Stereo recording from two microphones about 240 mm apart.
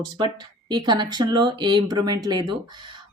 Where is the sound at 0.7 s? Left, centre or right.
Centre.